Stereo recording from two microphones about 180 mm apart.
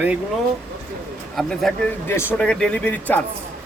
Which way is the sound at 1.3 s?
Centre (ahead or behind).